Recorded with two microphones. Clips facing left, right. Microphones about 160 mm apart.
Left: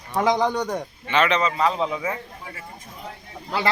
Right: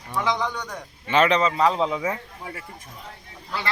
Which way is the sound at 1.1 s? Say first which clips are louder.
Right 2 dB; 40° right (ahead or behind).